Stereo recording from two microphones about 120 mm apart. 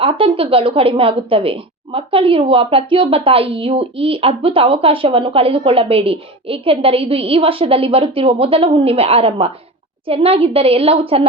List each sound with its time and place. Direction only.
0.0 s a woman's voice: 50° right (ahead or behind)